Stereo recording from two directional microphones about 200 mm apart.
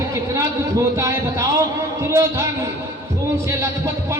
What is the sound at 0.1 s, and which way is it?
A man's voice, 15° right (ahead or behind).